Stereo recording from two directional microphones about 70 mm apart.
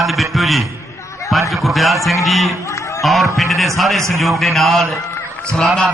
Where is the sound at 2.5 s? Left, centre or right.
Left.